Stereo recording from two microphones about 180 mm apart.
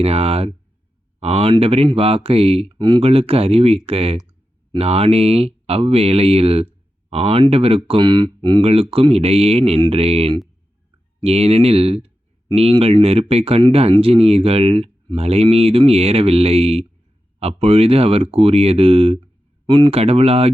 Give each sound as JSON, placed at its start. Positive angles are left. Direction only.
{"t": 0.0, "sound": "speech", "side_deg": -35}